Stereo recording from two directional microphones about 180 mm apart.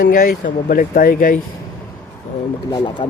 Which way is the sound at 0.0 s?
50° left (ahead or behind).